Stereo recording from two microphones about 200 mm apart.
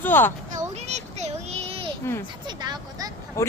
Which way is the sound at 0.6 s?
35° right (ahead or behind).